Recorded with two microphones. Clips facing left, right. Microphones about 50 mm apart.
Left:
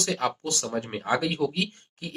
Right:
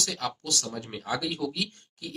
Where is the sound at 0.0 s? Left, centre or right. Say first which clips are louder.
Left 5 dB; left.